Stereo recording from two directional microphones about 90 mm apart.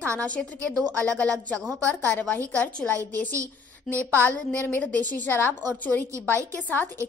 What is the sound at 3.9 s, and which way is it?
Speech, centre (ahead or behind).